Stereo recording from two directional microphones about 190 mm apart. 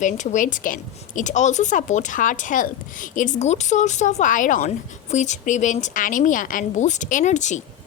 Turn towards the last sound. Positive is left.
turn(degrees=40)  # may be behind; listen again after turning